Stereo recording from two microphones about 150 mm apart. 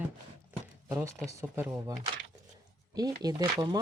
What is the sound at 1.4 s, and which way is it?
Speech, 20° right (ahead or behind).